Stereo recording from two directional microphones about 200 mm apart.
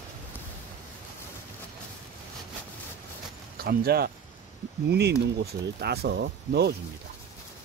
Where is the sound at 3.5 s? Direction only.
50° right (ahead or behind).